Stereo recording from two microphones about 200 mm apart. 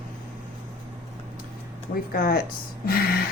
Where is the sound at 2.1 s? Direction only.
45° left (ahead or behind).